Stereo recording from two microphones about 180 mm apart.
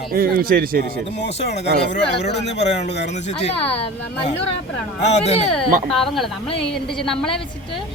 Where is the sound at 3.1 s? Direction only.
40° left (ahead or behind).